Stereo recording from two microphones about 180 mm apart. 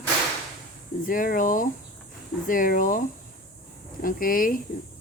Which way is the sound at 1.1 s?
50° left (ahead or behind).